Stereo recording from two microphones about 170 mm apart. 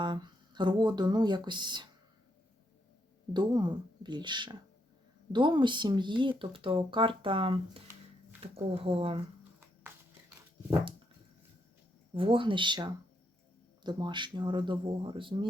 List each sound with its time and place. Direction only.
0.0 s speech: 25° right (ahead or behind)
3.3 s speech: 25° right (ahead or behind)
7.9 s a sound: 15° right (ahead or behind)
8.7 s speech: 35° right (ahead or behind)
12.1 s speech: 30° right (ahead or behind)